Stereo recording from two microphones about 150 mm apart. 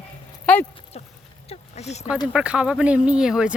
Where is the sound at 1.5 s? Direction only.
45° left (ahead or behind).